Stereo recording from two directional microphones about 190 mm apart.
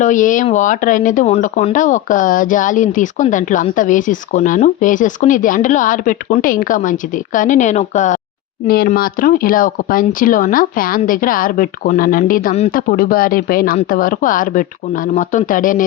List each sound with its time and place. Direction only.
0.0 s speech: 40° left (ahead or behind)
8.6 s speech: 50° left (ahead or behind)